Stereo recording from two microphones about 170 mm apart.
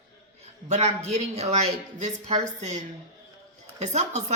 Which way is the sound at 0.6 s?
40° right (ahead or behind).